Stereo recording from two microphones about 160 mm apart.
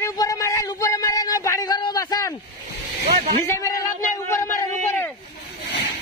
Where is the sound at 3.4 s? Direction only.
20° left (ahead or behind).